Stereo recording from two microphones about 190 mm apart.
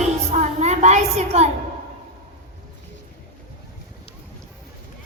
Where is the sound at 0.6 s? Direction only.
35° right (ahead or behind).